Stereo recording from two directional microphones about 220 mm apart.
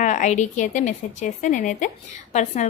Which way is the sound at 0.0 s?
35° left (ahead or behind).